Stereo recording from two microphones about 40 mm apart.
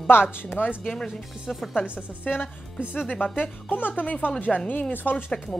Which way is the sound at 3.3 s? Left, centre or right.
Left.